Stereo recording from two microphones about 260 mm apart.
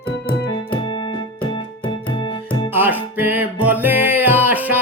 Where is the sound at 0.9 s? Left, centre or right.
Centre.